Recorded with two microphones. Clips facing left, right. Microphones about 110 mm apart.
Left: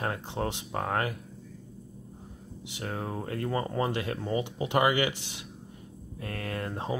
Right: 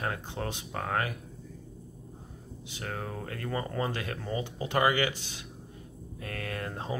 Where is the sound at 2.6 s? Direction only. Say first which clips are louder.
Left 3 dB; 25° left (ahead or behind).